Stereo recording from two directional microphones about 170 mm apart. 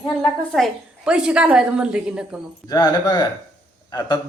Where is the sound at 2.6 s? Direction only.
25° left (ahead or behind).